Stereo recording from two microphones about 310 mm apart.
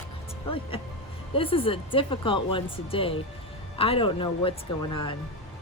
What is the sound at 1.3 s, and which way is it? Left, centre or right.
Speech, centre.